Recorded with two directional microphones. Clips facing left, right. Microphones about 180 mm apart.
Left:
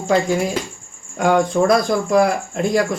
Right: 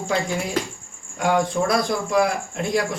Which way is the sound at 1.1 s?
50° left (ahead or behind).